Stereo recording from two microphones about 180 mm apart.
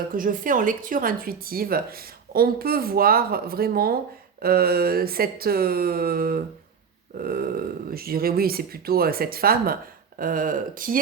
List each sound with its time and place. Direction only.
0.1 s speech: 50° right (ahead or behind)